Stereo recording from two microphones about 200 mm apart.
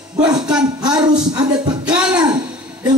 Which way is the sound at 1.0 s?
20° right (ahead or behind).